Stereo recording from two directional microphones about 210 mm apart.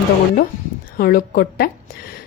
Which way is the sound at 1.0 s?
45° left (ahead or behind).